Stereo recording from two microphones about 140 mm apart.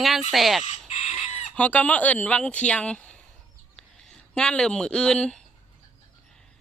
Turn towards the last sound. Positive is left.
turn(degrees=5)  # may be behind; listen again after turning